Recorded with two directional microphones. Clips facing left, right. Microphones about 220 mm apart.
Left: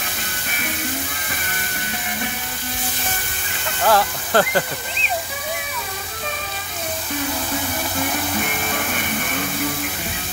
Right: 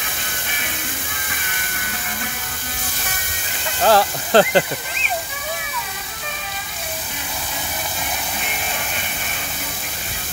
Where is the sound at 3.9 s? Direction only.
30° right (ahead or behind).